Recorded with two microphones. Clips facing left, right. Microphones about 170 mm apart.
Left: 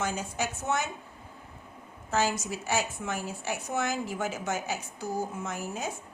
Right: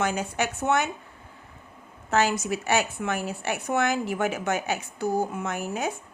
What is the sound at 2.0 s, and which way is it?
A woman's voice, 65° right (ahead or behind).